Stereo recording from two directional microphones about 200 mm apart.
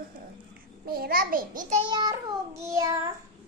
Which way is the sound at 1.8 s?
20° right (ahead or behind).